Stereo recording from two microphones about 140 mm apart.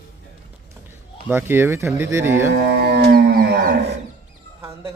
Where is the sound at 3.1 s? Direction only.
90° right.